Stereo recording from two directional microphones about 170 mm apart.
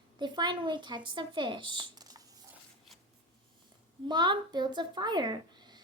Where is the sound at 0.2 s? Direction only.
25° right (ahead or behind).